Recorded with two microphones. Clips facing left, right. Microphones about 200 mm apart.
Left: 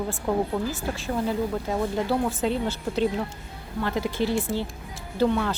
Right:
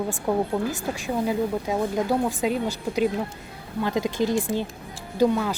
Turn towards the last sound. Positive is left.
turn(degrees=-10)  # may be behind; listen again after turning